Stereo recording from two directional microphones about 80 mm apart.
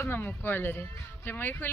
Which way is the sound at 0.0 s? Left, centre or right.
Left.